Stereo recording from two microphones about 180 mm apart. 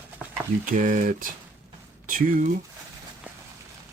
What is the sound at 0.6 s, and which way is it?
Speech, 50° right (ahead or behind).